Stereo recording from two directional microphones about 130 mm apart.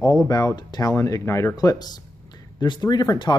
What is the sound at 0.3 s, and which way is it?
Speech, 30° left (ahead or behind).